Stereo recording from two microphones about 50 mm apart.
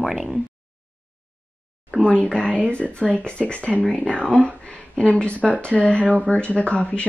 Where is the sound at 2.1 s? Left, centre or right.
Left.